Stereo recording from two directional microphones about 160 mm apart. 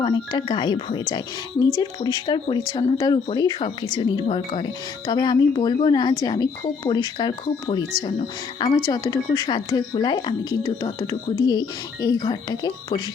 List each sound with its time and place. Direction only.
0.0 s a woman's voice: 30° left (ahead or behind)